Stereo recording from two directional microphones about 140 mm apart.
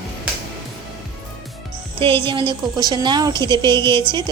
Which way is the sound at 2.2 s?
35° right (ahead or behind).